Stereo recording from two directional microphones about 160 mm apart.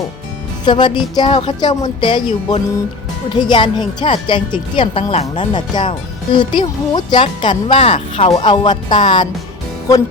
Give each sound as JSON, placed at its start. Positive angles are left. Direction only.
{"t": 0.6, "sound": "a woman's voice", "side_deg": 30}
{"t": 7.7, "sound": "a woman's voice", "side_deg": 40}
{"t": 8.4, "sound": "speech", "side_deg": 30}